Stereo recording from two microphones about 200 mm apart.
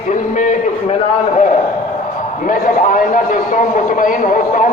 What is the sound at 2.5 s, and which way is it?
A man's voice, 40° left (ahead or behind).